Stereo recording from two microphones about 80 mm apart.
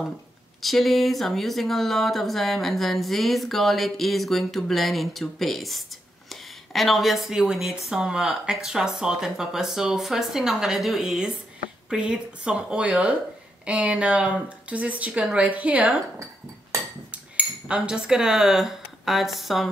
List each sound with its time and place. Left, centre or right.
0.6 s speech: centre
17.1 s cutlery: centre